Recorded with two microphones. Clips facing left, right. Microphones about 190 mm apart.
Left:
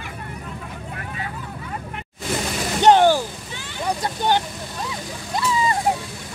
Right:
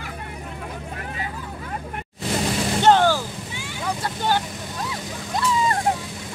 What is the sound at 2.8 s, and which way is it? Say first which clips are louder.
Vehicle: left 3 dB; 15° left (ahead or behind).